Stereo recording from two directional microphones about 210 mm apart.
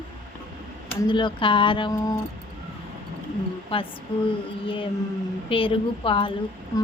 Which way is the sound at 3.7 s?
25° left (ahead or behind).